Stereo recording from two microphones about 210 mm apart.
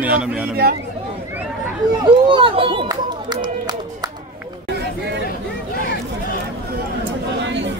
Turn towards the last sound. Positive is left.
turn(degrees=-60)  # may be behind; listen again after turning